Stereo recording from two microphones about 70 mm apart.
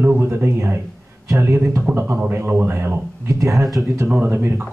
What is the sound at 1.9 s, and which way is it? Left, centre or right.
A man's voice, right.